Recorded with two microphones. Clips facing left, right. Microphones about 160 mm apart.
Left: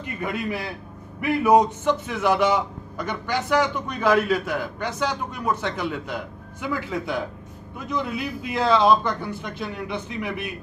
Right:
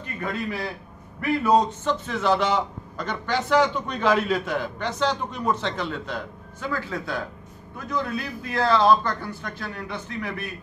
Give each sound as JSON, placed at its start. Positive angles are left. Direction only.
{"t": 0.0, "sound": "a man's voice", "side_deg": 15}